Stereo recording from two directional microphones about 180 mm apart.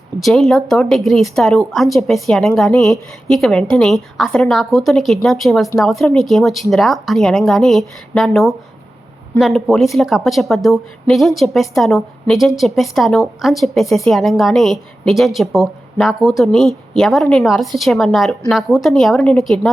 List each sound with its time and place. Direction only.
0.2 s a woman's voice: centre (ahead or behind)